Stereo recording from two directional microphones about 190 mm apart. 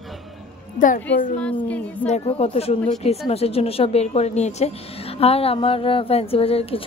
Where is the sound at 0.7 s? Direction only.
45° left (ahead or behind).